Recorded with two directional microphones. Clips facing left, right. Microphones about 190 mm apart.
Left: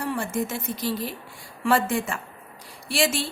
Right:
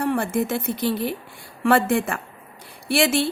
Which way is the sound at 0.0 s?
60° right (ahead or behind).